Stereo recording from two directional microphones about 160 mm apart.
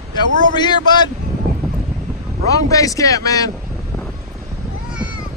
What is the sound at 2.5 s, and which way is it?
Speech, 20° left (ahead or behind).